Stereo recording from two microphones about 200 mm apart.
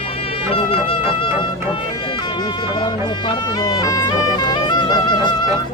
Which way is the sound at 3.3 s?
20° left (ahead or behind).